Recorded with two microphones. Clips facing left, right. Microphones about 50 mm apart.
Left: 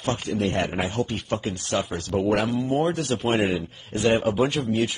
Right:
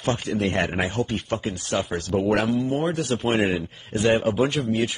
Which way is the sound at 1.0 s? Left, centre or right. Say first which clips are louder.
Right 1 dB; centre.